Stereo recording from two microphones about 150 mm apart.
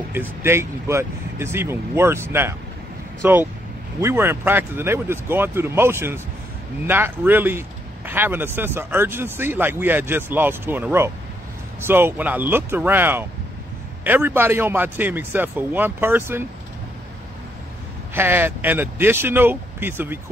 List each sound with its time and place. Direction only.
0.1 s a man's voice: 15° right (ahead or behind)
18.1 s a man's voice: 15° right (ahead or behind)